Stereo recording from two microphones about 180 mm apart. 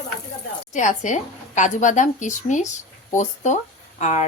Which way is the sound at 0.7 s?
45° left (ahead or behind).